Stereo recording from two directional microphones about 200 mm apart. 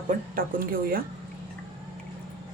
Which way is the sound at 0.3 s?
45° right (ahead or behind).